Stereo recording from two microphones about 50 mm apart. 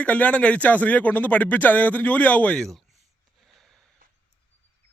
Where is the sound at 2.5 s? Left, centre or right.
Centre.